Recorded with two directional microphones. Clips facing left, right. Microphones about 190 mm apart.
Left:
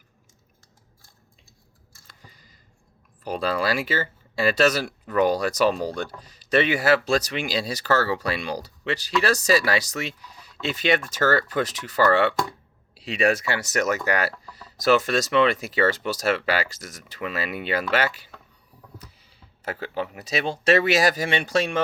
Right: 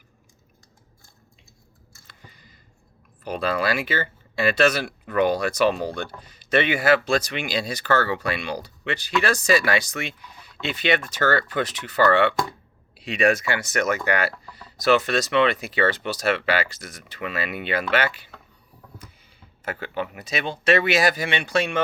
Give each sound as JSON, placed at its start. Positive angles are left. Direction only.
{"t": 2.2, "sound": "a sound", "side_deg": 40}
{"t": 3.2, "sound": "speech", "side_deg": 40}
{"t": 13.3, "sound": "speech", "side_deg": 40}
{"t": 19.6, "sound": "speech", "side_deg": 35}